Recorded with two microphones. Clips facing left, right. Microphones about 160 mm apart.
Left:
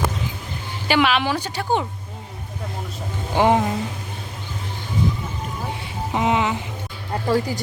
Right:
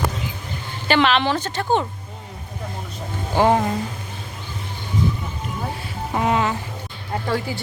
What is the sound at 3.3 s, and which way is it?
Speech, 15° left (ahead or behind).